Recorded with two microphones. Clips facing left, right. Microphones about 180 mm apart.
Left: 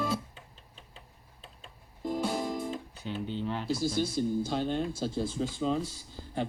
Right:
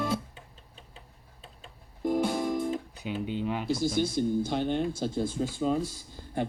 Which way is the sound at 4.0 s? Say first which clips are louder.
Right 3 dB; 60° right (ahead or behind).